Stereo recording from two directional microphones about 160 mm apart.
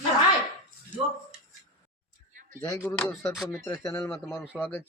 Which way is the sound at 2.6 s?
20° left (ahead or behind).